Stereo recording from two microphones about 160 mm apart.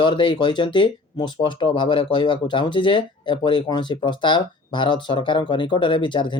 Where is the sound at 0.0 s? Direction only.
30° left (ahead or behind).